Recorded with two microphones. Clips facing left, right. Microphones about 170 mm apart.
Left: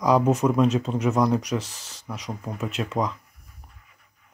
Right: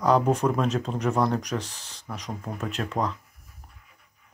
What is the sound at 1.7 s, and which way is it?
Speech, 35° left (ahead or behind).